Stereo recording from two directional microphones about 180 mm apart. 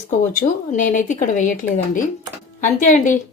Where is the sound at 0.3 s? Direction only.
45° left (ahead or behind).